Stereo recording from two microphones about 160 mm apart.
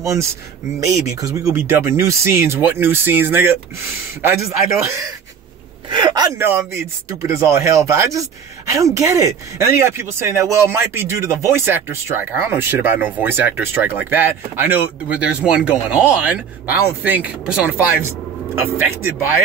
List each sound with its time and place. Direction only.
0.0 s a man's voice: 20° right (ahead or behind)
5.9 s a sound: 30° right (ahead or behind)
6.3 s speech: 15° right (ahead or behind)